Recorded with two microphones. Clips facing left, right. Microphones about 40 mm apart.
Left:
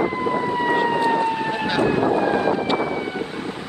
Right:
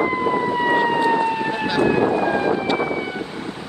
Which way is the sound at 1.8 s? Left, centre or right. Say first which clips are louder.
Right 1 dB; right.